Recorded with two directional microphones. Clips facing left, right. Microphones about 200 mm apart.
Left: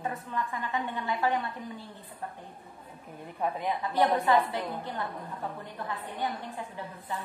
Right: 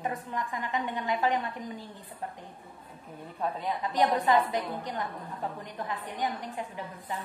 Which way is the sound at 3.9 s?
15° right (ahead or behind).